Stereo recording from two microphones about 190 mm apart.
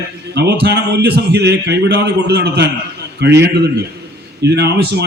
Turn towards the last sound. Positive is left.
turn(degrees=-60)  # may be behind; listen again after turning